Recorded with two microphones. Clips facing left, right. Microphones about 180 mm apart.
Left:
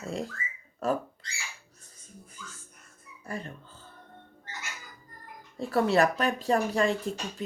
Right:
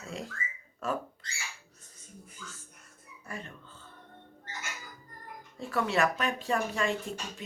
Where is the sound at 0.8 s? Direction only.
35° left (ahead or behind).